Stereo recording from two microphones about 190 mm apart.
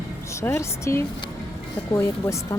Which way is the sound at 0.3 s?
15° left (ahead or behind).